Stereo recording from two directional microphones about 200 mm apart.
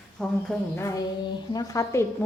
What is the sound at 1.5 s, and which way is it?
Speech, 15° left (ahead or behind).